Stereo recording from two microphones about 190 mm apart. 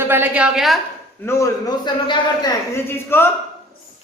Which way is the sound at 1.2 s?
15° left (ahead or behind).